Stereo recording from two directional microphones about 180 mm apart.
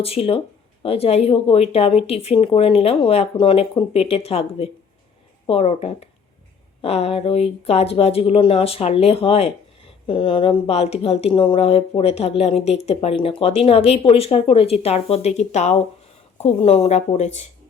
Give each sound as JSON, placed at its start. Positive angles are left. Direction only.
{"t": 0.0, "sound": "speech", "side_deg": 30}